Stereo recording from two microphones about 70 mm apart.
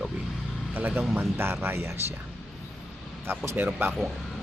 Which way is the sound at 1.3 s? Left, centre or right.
Right.